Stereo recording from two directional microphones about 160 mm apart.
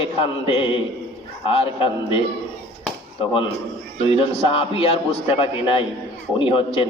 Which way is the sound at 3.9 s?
35° left (ahead or behind).